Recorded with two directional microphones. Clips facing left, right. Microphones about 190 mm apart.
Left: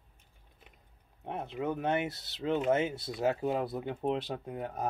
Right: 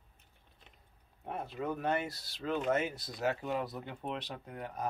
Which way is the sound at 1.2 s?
20° left (ahead or behind).